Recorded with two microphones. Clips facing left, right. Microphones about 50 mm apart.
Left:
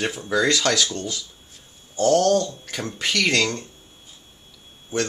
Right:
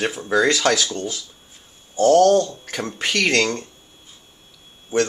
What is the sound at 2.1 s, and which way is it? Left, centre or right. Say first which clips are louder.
Speech: right 5 dB; centre.